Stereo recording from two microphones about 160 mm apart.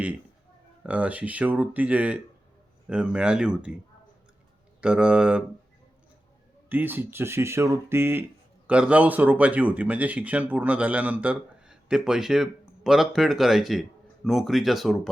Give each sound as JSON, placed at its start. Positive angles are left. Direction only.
{"t": 0.9, "sound": "speech", "side_deg": -10}
{"t": 4.8, "sound": "speech", "side_deg": -5}
{"t": 6.7, "sound": "speech", "side_deg": -10}